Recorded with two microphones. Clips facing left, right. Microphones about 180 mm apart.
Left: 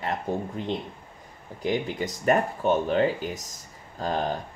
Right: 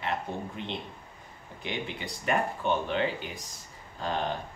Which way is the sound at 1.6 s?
40° left (ahead or behind).